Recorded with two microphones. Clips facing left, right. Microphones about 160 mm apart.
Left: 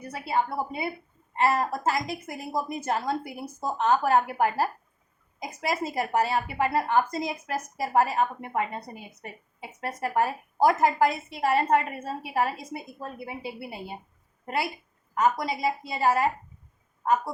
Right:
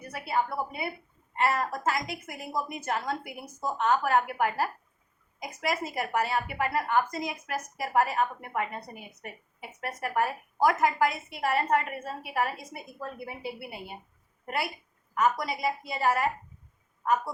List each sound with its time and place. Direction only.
0.0 s a woman's voice: 25° left (ahead or behind)
15.1 s a woman's voice: 30° left (ahead or behind)